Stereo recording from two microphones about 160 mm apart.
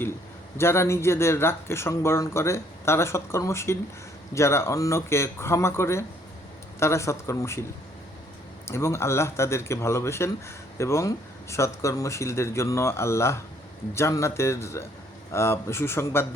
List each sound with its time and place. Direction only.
0.5 s speech: 15° left (ahead or behind)
8.6 s speech: 15° left (ahead or behind)